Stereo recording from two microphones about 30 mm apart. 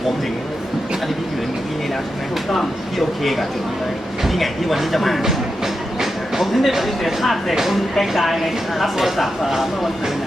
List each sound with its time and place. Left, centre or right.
2.5 s speech: centre
6.4 s speech: centre
7.5 s speech: centre